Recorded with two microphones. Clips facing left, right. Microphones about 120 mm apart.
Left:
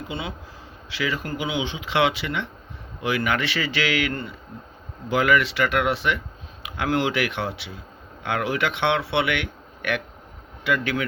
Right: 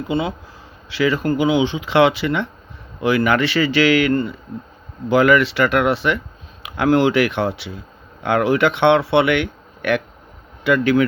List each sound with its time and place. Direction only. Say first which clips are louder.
0.1 s a man's voice: right 14 dB; 35° right (ahead or behind)